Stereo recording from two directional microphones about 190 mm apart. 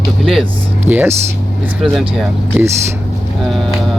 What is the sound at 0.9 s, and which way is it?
Speech, 10° right (ahead or behind).